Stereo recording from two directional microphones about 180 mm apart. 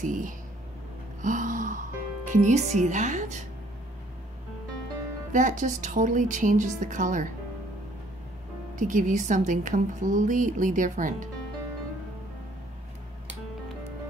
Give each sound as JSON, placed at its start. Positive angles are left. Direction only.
{"t": 0.0, "sound": "a woman's voice", "side_deg": -45}
{"t": 1.2, "sound": "music", "side_deg": -45}
{"t": 5.3, "sound": "a woman's voice", "side_deg": -45}
{"t": 8.7, "sound": "a woman's voice", "side_deg": -45}